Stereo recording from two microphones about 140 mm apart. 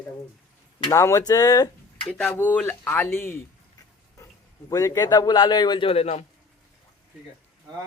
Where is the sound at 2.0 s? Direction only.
5° left (ahead or behind).